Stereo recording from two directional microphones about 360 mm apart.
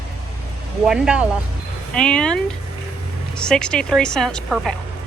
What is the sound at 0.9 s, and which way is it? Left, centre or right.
A woman's voice, centre.